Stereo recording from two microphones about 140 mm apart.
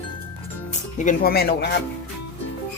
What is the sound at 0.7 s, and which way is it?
Speech, 65° left (ahead or behind).